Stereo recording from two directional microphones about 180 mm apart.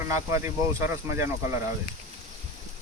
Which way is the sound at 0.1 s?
15° right (ahead or behind).